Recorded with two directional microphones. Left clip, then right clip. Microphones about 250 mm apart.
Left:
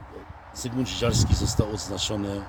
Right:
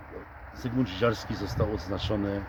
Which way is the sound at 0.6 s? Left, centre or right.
Centre.